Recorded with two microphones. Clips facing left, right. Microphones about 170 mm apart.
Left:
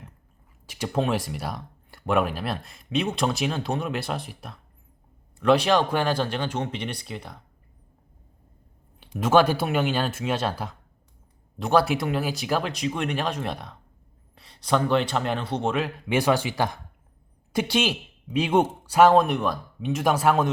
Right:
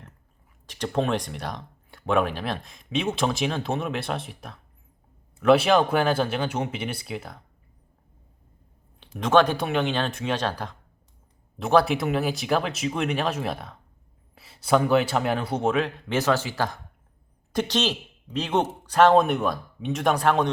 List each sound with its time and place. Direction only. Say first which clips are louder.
0.7 s speech: even; 5° left (ahead or behind)
9.0 s speech: even; 10° left (ahead or behind)
11.5 s speech: right 1 dB; centre (ahead or behind)
16.0 s speech: left 5 dB; 10° left (ahead or behind)